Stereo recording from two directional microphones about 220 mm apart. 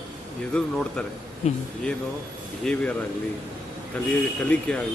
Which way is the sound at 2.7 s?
5° left (ahead or behind).